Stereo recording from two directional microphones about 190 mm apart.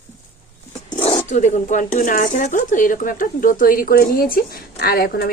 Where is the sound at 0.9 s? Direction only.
30° left (ahead or behind).